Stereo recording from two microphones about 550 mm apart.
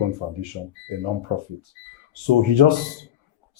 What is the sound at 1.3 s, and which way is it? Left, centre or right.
Speech, right.